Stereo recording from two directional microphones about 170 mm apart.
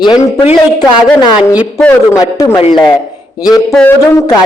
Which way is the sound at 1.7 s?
15° left (ahead or behind).